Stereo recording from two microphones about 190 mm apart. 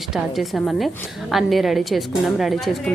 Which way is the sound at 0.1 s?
Centre (ahead or behind).